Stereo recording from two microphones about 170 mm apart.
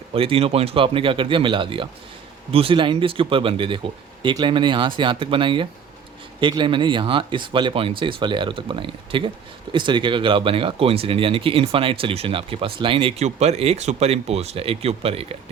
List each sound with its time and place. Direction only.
0.1 s speech: 35° right (ahead or behind)